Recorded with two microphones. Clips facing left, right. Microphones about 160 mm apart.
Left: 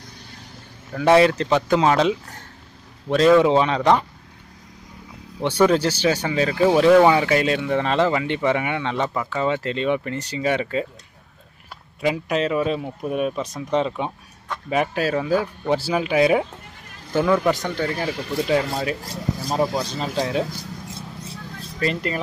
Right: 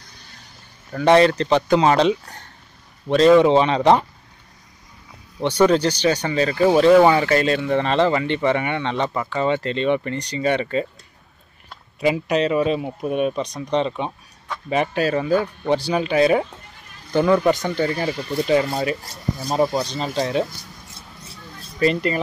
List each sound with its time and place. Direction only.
0.9 s speech: 5° left (ahead or behind)
3.7 s speech: 25° right (ahead or behind)
5.6 s speech: 10° left (ahead or behind)
12.0 s speech: centre (ahead or behind)
19.5 s speech: 5° left (ahead or behind)
21.7 s speech: centre (ahead or behind)